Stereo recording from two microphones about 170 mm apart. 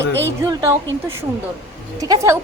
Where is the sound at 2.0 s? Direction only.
20° right (ahead or behind).